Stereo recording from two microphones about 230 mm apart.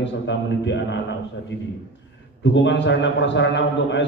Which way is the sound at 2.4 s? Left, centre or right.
Left.